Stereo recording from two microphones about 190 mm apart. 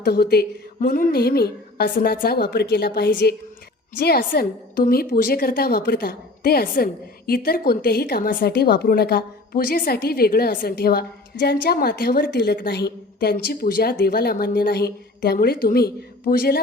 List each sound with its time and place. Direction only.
0.0 s a woman's voice: 55° left (ahead or behind)